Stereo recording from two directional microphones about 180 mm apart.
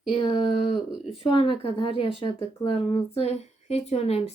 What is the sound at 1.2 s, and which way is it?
Speech, 30° left (ahead or behind).